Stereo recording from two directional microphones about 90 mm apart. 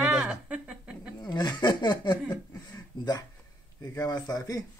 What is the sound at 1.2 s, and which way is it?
Speech, 55° left (ahead or behind).